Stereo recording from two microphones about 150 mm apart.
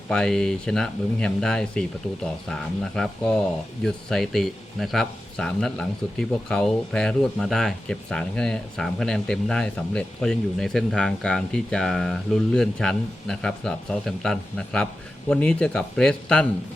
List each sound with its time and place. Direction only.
0.1 s speech: 5° left (ahead or behind)